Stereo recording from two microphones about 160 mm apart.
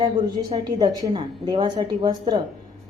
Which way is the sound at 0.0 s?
25° right (ahead or behind).